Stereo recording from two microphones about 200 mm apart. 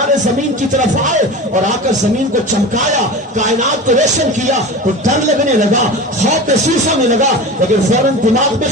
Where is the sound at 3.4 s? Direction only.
35° right (ahead or behind).